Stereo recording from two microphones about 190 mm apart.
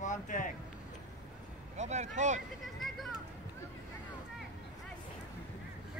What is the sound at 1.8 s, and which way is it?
Speech, 35° right (ahead or behind).